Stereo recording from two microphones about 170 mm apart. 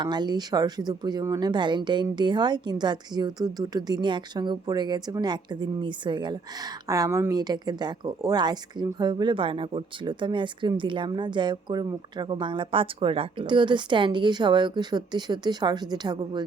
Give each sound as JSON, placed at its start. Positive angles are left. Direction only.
{"t": 0.0, "sound": "speech", "side_deg": -25}